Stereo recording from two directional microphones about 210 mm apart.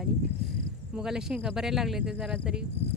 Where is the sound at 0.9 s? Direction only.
5° right (ahead or behind).